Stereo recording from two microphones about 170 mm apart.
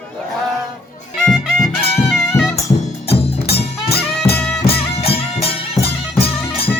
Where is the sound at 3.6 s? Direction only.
70° left (ahead or behind).